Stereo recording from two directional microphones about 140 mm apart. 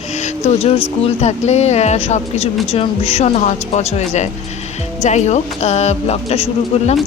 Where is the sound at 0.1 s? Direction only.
55° left (ahead or behind).